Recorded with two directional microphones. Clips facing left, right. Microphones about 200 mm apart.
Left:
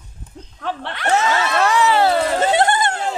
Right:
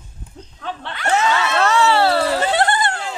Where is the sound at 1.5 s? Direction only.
15° left (ahead or behind).